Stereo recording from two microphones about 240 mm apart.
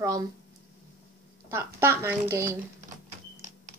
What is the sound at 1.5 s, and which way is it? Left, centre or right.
A woman's voice, centre.